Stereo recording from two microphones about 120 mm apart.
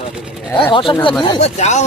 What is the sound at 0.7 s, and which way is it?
Speech, 45° left (ahead or behind).